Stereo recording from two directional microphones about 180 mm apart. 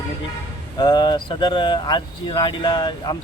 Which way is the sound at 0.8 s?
25° left (ahead or behind).